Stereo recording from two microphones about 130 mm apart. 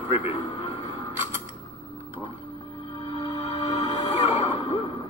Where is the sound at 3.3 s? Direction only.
40° left (ahead or behind).